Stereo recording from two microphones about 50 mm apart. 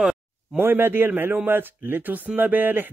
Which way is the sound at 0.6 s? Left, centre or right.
Right.